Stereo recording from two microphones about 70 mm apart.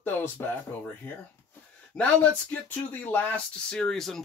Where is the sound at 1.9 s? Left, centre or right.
Centre.